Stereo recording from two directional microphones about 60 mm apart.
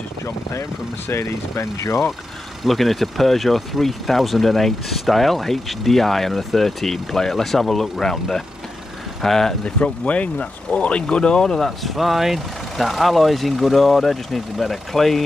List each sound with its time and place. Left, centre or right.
0.2 s speech: left
2.6 s speech: centre
9.8 s speech: left; by 15.2 s centre